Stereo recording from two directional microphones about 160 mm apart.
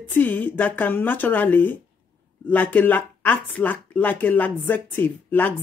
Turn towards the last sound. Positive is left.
turn(degrees=10)  # may be behind; listen again after turning